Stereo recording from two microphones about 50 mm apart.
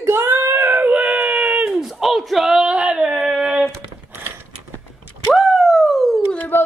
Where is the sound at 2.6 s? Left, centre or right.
Right.